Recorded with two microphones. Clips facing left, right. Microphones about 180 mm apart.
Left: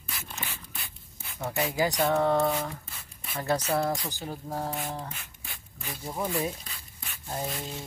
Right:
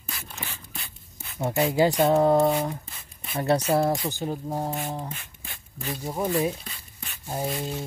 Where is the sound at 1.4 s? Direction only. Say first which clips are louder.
Right 6 dB; 25° right (ahead or behind).